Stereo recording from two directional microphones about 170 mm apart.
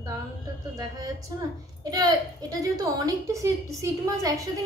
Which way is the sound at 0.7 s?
20° right (ahead or behind).